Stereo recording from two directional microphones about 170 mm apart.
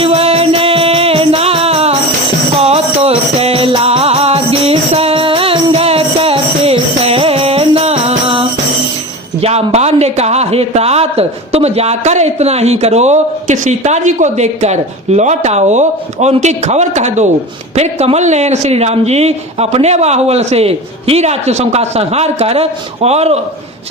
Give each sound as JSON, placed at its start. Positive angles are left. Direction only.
{"t": 0.0, "sound": "music", "side_deg": -35}
{"t": 9.4, "sound": "a man's voice", "side_deg": -40}